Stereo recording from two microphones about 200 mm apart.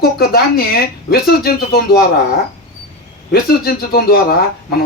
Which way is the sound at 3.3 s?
50° left (ahead or behind).